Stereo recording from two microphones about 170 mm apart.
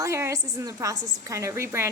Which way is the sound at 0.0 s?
15° right (ahead or behind).